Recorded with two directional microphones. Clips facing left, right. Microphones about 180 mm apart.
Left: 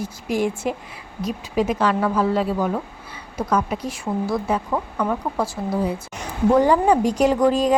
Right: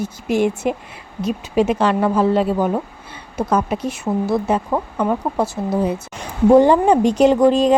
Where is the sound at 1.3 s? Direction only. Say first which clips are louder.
Right 4 dB; 70° right (ahead or behind).